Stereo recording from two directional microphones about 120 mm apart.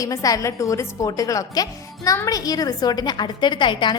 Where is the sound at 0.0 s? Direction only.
30° left (ahead or behind).